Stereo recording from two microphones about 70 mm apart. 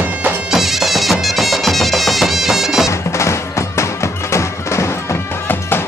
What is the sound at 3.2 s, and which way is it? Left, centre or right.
Music, left.